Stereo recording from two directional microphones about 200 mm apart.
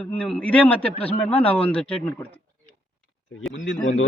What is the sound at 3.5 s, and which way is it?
Speech, 75° left (ahead or behind).